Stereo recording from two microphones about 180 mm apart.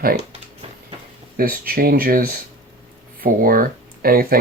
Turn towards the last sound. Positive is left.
turn(degrees=-55)  # may be behind; listen again after turning